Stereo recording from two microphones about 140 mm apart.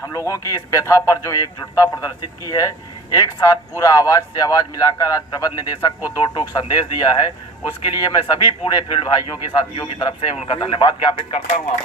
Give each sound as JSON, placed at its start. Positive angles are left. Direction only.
{"t": 0.3, "sound": "a man's voice", "side_deg": 25}